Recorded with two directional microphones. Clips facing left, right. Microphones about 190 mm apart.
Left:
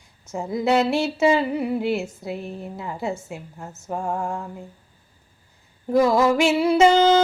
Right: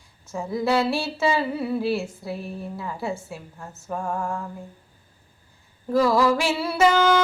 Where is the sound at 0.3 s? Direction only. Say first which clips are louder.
Left 2 dB; 20° left (ahead or behind).